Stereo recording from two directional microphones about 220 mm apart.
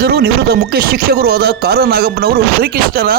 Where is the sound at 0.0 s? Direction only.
45° right (ahead or behind).